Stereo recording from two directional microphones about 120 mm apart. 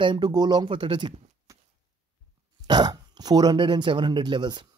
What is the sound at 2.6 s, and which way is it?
Speech, 35° right (ahead or behind).